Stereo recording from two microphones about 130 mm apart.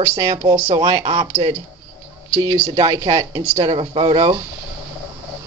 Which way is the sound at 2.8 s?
45° right (ahead or behind).